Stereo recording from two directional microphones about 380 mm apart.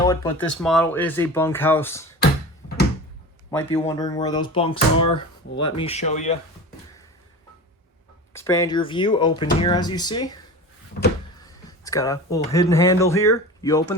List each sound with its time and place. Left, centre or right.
0.0 s speech: centre
3.7 s speech: centre
8.3 s speech: centre
11.0 s power windows: left
11.4 s speech: centre